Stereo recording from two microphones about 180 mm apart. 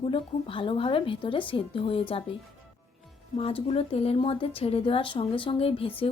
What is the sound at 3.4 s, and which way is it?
A woman's voice, 35° left (ahead or behind).